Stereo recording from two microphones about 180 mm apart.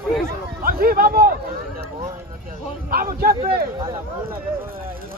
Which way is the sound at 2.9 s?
55° right (ahead or behind).